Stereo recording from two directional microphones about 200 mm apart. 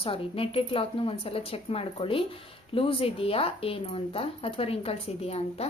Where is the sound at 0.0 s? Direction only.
25° left (ahead or behind).